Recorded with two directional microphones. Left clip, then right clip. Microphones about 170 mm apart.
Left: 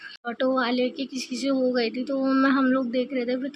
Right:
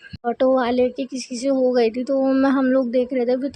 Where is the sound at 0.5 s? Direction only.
55° right (ahead or behind).